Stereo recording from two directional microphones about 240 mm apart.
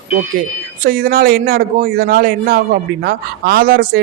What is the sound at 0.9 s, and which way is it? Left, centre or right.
A man's voice, right.